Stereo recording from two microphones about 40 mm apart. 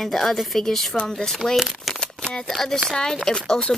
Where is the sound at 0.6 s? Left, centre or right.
Centre.